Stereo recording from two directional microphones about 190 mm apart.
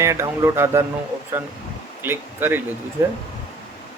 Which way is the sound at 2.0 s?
10° right (ahead or behind).